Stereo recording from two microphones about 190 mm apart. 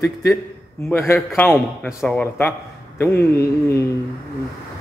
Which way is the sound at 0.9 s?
10° left (ahead or behind).